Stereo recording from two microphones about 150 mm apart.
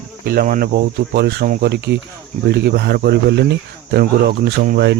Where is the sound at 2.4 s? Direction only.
90° right.